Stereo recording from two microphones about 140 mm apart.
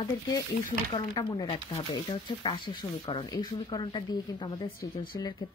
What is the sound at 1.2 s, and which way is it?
Speech, 35° left (ahead or behind).